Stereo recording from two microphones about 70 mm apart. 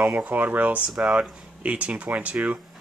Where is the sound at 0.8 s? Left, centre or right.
Centre.